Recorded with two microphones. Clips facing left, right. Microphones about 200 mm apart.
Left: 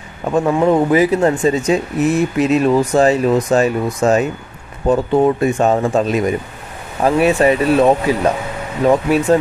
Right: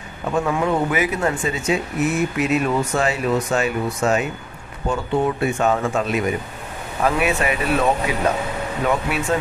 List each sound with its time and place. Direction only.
0.5 s speech: 30° left (ahead or behind)